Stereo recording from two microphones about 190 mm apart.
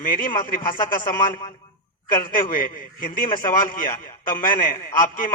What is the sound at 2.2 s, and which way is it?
A man's voice, 45° left (ahead or behind).